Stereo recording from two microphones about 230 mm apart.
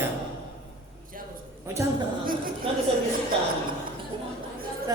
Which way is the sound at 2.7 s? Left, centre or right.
Right.